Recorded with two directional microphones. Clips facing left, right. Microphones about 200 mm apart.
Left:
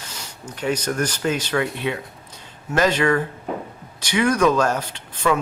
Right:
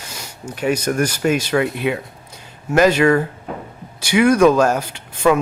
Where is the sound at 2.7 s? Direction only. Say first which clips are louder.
Right 6 dB; 10° right (ahead or behind).